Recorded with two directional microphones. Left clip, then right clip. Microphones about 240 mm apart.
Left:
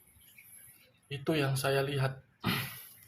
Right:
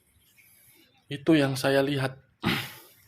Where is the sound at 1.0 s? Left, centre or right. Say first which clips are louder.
Right 9 dB; right.